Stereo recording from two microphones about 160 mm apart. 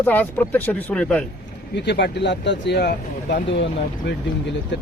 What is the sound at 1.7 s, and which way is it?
Speech, 90° left.